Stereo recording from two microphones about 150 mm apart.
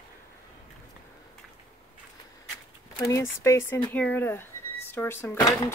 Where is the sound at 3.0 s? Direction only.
20° left (ahead or behind).